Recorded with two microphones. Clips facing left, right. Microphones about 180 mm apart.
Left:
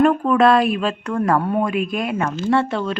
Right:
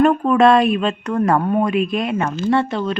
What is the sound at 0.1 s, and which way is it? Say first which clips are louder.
Speech: right 1 dB; 20° right (ahead or behind).